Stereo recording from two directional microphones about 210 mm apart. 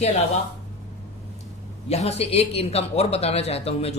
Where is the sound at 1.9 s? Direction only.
30° left (ahead or behind).